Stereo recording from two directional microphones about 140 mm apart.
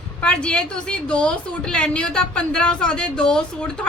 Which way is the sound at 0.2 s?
5° left (ahead or behind).